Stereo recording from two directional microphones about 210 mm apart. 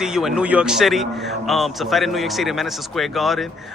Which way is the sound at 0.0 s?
Centre (ahead or behind).